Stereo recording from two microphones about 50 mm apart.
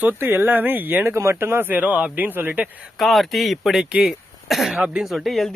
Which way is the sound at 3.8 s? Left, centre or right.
Right.